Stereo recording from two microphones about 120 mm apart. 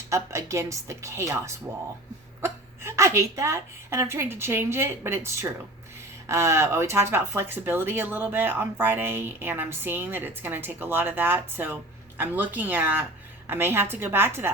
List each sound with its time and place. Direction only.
0.1 s a woman's voice: 25° right (ahead or behind)